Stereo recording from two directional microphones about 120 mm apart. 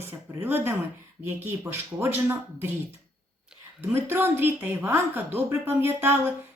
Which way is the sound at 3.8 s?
15° right (ahead or behind).